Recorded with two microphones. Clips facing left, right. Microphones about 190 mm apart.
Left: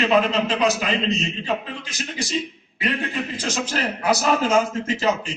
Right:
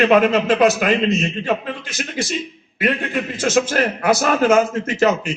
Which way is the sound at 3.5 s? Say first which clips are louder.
Right 10 dB; 55° right (ahead or behind).